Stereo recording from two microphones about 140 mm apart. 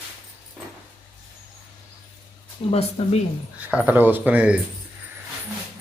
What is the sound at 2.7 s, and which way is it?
Speech, 45° left (ahead or behind).